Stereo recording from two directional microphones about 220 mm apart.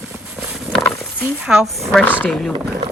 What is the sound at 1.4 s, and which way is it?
Speech, centre (ahead or behind).